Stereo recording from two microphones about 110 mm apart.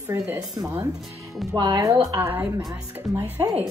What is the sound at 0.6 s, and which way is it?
Speech, 25° right (ahead or behind).